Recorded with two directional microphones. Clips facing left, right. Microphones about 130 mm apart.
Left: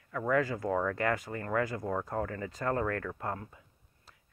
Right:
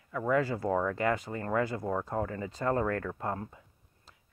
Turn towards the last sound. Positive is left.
turn(degrees=-30)  # may be behind; listen again after turning